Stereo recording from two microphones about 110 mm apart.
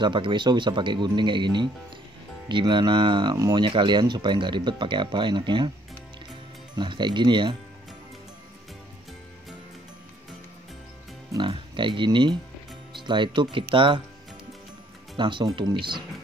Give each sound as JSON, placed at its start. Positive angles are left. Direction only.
{"t": 0.0, "sound": "speech", "side_deg": -45}
{"t": 6.8, "sound": "speech", "side_deg": -45}
{"t": 11.3, "sound": "speech", "side_deg": -50}
{"t": 15.1, "sound": "speech", "side_deg": -45}